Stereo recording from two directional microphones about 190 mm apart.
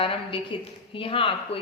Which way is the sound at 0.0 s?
30° left (ahead or behind).